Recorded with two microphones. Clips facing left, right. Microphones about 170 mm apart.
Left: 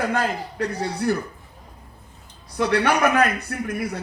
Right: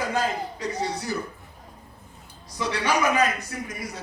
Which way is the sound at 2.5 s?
60° left (ahead or behind).